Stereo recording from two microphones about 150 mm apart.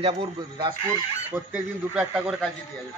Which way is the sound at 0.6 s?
30° right (ahead or behind).